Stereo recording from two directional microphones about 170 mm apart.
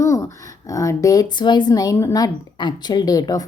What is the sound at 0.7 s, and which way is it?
Speech, 20° left (ahead or behind).